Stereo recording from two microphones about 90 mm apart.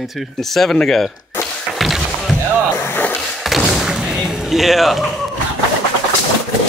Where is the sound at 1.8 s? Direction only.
Centre (ahead or behind).